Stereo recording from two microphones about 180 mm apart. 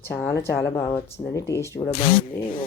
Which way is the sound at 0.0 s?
10° left (ahead or behind).